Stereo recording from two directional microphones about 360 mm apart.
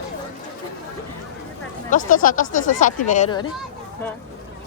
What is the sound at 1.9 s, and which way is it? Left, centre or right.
Speech, left.